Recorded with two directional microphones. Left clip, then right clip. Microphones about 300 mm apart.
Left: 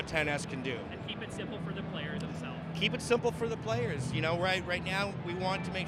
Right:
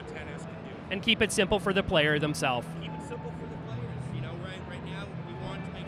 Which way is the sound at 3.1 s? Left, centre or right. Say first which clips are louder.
Left 10 dB; left.